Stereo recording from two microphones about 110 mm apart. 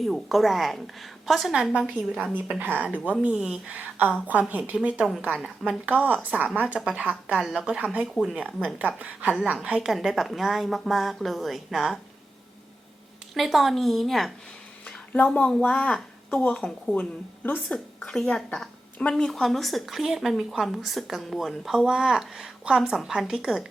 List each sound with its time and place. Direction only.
0.0 s a woman's voice: centre (ahead or behind)
2.3 s a woman's voice: 15° right (ahead or behind)
9.9 s a woman's voice: centre (ahead or behind)
13.3 s a woman's voice: centre (ahead or behind)
14.8 s a woman's voice: 15° left (ahead or behind); by 23.6 s 5° right (ahead or behind)